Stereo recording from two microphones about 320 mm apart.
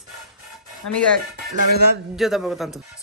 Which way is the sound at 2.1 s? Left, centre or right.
Centre.